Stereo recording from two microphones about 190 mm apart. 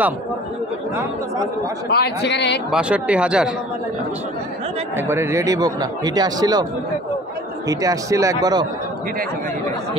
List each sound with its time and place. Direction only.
1.9 s speech: 60° left (ahead or behind)
2.7 s speech: 5° right (ahead or behind)
4.9 s speech: 15° right (ahead or behind)
7.6 s a man's voice: 20° right (ahead or behind)